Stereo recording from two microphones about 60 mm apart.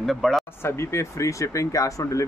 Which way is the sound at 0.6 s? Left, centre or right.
Left.